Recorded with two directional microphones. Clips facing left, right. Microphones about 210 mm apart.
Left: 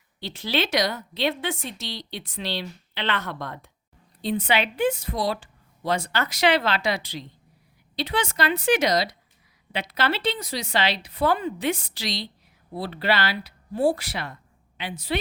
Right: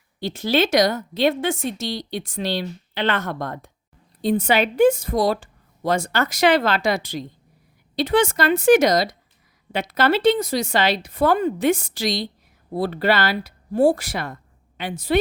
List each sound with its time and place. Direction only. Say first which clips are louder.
0.2 s a woman's voice: right 7 dB; 45° right (ahead or behind)